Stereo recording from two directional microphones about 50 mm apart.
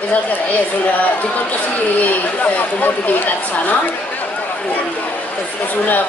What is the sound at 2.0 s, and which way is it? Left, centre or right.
Speech, left.